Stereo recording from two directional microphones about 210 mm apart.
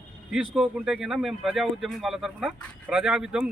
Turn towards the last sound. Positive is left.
turn(degrees=-5)  # may be behind; listen again after turning